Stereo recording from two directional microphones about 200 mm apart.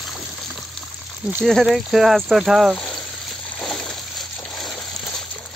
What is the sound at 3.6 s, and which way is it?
Water, centre (ahead or behind).